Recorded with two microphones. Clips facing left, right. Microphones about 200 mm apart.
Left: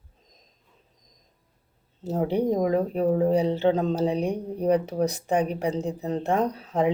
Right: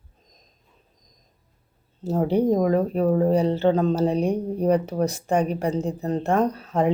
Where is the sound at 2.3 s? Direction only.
20° left (ahead or behind).